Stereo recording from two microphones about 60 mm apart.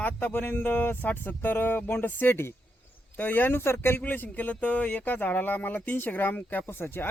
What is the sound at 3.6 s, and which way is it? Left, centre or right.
Speech, left.